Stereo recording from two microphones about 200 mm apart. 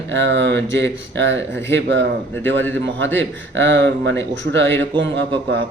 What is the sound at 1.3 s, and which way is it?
Speech, 10° left (ahead or behind).